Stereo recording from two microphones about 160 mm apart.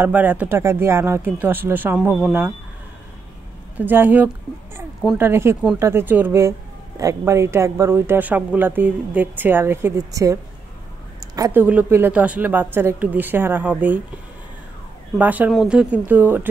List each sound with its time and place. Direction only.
0.0 s speech: 10° right (ahead or behind)
3.7 s speech: 10° right (ahead or behind)
15.1 s speech: 10° right (ahead or behind)